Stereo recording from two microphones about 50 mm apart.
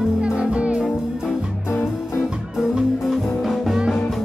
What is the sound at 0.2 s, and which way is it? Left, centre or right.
Music, right.